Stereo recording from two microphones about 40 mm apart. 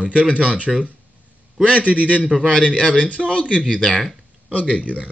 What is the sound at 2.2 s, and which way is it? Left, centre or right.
Speech, right.